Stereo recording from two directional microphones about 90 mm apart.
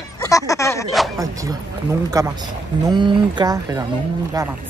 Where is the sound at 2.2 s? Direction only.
40° right (ahead or behind).